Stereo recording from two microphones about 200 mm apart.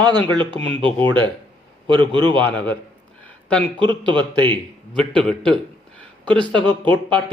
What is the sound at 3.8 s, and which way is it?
Speech, 25° right (ahead or behind).